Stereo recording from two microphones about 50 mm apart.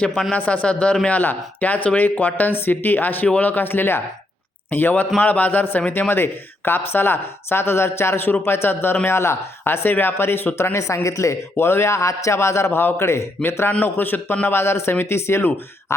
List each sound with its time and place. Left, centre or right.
0.3 s speech: left
1.0 s speech: left
4.7 s speech: left
5.9 s speech: left
10.8 s speech: left
11.5 s a man's voice: left
13.7 s speech: left
14.4 s a man's voice: left
15.9 s a sound: left